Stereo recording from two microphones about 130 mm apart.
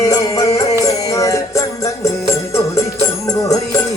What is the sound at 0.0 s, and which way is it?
Music, 25° left (ahead or behind).